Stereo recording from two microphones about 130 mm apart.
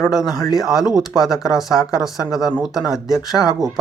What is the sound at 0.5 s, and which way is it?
Speech, 5° right (ahead or behind).